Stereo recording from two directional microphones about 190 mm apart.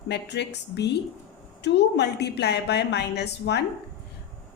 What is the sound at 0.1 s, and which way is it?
A woman's voice, 65° left (ahead or behind).